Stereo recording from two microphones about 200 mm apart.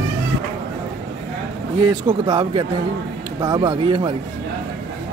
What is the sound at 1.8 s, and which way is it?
Speech, 25° right (ahead or behind).